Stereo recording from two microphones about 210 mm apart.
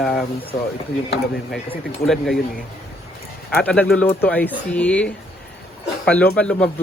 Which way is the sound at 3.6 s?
5° left (ahead or behind).